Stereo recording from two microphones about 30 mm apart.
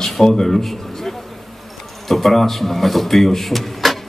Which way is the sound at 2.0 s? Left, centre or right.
Centre.